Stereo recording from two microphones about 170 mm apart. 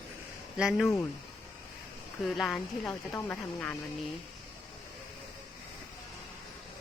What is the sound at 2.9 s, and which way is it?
Speech, 10° left (ahead or behind).